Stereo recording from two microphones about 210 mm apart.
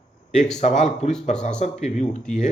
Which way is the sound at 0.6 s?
35° left (ahead or behind).